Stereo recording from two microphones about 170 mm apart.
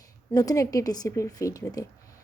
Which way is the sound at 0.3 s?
20° left (ahead or behind).